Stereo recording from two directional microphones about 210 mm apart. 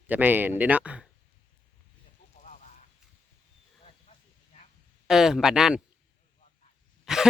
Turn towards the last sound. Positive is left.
turn(degrees=0)  # may be behind; listen again after turning